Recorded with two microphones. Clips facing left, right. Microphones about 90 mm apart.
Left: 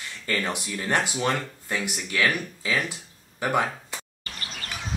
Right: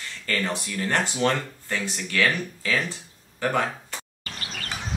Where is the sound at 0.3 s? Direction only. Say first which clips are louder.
Right 1 dB; 15° left (ahead or behind).